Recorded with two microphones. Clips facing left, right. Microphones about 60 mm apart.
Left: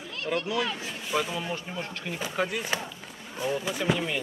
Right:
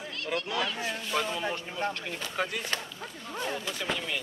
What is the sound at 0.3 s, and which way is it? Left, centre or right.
Speech, centre.